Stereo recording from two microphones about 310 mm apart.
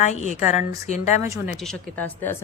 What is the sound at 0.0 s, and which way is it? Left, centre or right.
A woman's voice, left.